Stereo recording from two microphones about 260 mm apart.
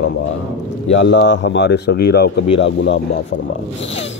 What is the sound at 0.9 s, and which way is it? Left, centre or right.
A man's voice, left.